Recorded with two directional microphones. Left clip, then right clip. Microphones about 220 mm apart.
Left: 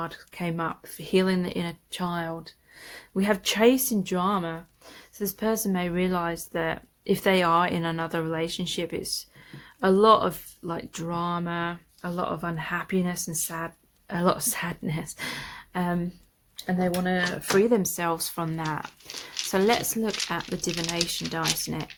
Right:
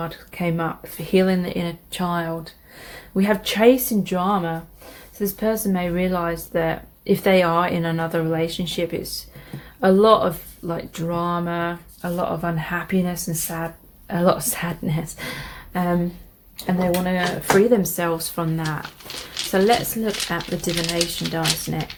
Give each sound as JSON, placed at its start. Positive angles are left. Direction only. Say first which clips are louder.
{"t": 0.0, "sound": "speech", "louder": "right 6 dB", "side_deg": 40}